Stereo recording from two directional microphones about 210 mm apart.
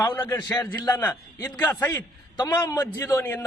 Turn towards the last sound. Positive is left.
turn(degrees=10)  # may be behind; listen again after turning